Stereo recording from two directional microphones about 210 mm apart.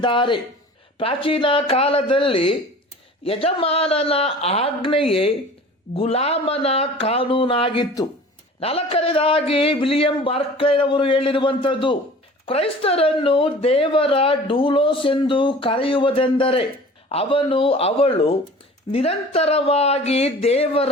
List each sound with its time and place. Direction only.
0.0 s speech: 25° left (ahead or behind)